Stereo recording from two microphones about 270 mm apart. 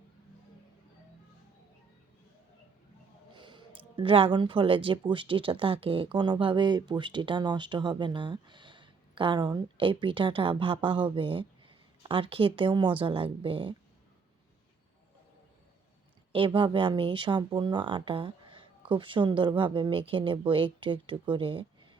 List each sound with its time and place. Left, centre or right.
3.3 s a sound: centre
3.8 s speech: centre
16.3 s speech: centre